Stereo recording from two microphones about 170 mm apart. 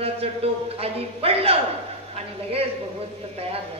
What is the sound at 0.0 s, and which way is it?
A woman's voice, 35° right (ahead or behind).